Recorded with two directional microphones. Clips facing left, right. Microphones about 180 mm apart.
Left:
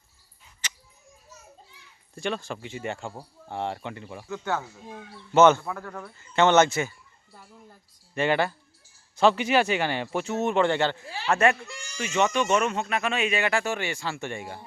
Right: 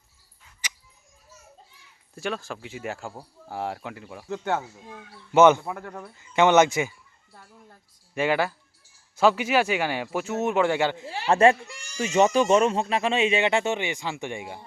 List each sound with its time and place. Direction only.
0.6 s a sound: 10° right (ahead or behind)
2.1 s speech: 5° right (ahead or behind)
4.3 s speech: 25° right (ahead or behind)
5.3 s speech: 15° right (ahead or behind)
7.3 s speech: 5° left (ahead or behind)
11.3 s speech: 30° right (ahead or behind)